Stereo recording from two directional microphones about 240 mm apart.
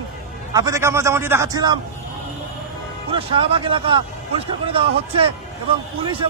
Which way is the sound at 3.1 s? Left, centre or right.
Right.